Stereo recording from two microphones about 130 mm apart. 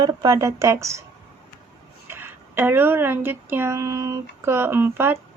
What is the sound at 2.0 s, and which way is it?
Speech, 15° right (ahead or behind).